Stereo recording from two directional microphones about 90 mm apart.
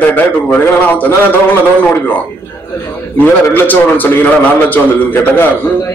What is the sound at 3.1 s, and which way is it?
A man's voice, 20° left (ahead or behind).